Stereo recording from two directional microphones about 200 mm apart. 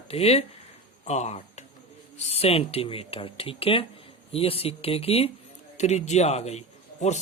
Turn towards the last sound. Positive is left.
turn(degrees=35)  # may be behind; listen again after turning